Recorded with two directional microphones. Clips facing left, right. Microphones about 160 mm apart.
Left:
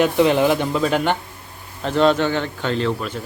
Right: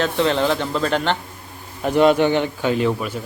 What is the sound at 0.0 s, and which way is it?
Speech, 15° left (ahead or behind).